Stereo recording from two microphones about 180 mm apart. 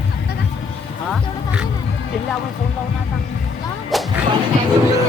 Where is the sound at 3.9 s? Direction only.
Centre (ahead or behind).